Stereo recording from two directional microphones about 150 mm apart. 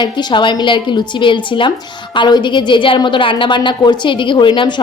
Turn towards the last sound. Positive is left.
turn(degrees=35)  # may be behind; listen again after turning